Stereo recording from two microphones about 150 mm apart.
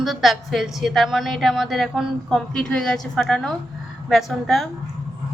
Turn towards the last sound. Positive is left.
turn(degrees=0)  # may be behind; listen again after turning